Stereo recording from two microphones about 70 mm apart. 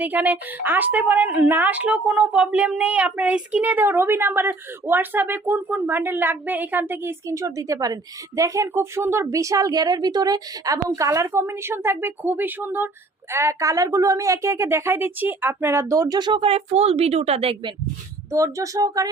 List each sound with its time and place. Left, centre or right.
0.0 s a woman's voice: right
8.4 s speech: right
9.3 s a woman's voice: right
13.3 s a woman's voice: right
15.9 s speech: right
18.3 s a woman's voice: right